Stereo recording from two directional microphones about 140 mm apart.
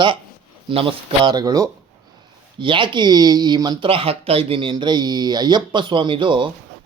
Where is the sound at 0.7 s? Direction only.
40° right (ahead or behind).